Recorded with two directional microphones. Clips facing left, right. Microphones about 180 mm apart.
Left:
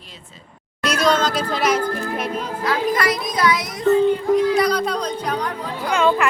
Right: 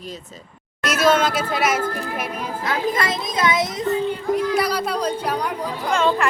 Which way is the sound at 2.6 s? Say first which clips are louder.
Left 3 dB; 25° right (ahead or behind).